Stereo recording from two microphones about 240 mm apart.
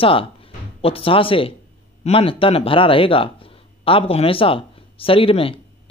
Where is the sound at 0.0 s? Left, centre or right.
Left.